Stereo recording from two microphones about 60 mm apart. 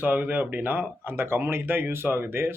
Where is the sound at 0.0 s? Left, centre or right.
Right.